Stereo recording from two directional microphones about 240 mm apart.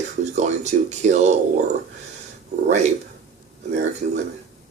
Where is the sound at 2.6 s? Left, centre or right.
Right.